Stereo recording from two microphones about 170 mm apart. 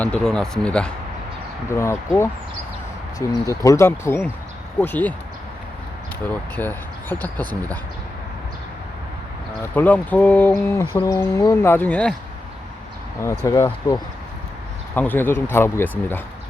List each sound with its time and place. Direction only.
0.0 s speech: 5° left (ahead or behind)
6.2 s speech: 10° left (ahead or behind)
9.7 s speech: 10° left (ahead or behind)
13.4 s speech: 20° left (ahead or behind)
14.9 s speech: 10° left (ahead or behind)